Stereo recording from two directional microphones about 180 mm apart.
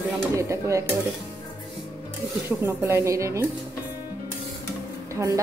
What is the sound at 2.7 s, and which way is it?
Speech, 15° right (ahead or behind).